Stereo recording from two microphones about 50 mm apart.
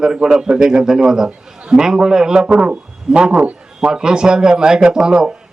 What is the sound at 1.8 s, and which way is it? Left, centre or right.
A man's voice, centre.